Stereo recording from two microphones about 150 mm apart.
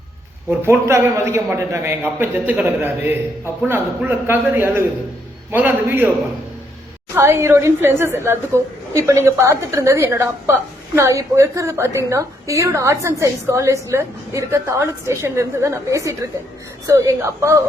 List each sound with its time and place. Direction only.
0.6 s a man's voice: 15° right (ahead or behind)
7.2 s a woman's voice: 15° right (ahead or behind)